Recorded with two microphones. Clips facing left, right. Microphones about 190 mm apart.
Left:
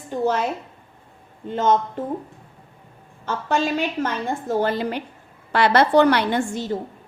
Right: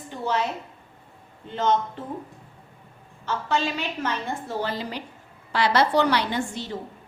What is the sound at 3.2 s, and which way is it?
A woman's voice, 50° left (ahead or behind).